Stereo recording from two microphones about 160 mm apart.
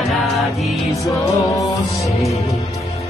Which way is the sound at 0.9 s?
20° left (ahead or behind).